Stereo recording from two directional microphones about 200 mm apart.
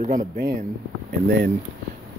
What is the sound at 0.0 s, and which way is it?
Speech, 40° right (ahead or behind).